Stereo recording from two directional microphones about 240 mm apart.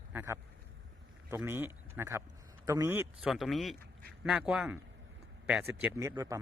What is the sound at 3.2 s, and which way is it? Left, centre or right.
A man's voice, centre.